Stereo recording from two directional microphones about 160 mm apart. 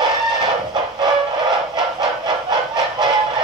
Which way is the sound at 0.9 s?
25° right (ahead or behind).